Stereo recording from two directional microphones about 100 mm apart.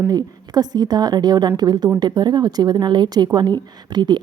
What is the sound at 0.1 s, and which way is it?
A woman's voice, 40° right (ahead or behind).